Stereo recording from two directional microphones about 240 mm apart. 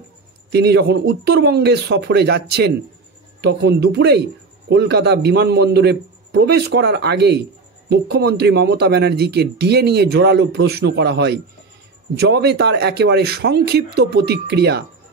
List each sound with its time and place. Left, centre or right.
0.5 s a man's voice: right